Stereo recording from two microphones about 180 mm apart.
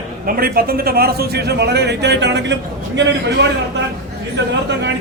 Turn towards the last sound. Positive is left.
turn(degrees=-75)  # may be behind; listen again after turning